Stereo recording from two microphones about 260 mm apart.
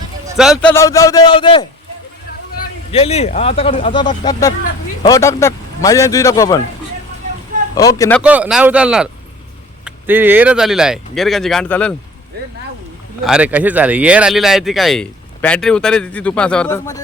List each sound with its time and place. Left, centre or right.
0.3 s speech: centre
0.7 s a man's voice: centre
2.9 s a man's voice: left
7.8 s a man's voice: centre
8.2 s speech: centre
13.2 s speech: centre